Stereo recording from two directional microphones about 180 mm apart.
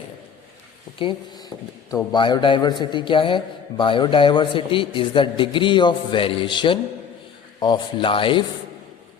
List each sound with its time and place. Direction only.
0.9 s a man's voice: 25° left (ahead or behind)